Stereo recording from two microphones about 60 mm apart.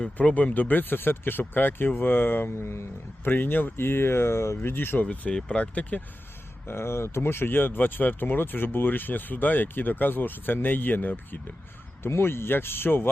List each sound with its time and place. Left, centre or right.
0.0 s speech: left
3.2 s speech: left
5.3 s speech: centre
6.7 s speech: left
12.0 s speech: left